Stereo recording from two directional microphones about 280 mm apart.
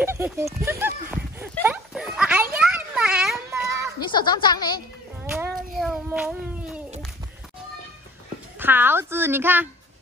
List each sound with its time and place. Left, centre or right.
0.0 s clip-clop: centre
1.6 s a sound: centre
4.0 s a woman's voice: centre
5.3 s child singing: centre
8.5 s a woman's voice: centre